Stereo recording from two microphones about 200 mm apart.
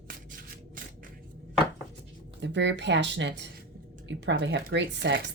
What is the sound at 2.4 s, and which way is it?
Speech, 60° right (ahead or behind).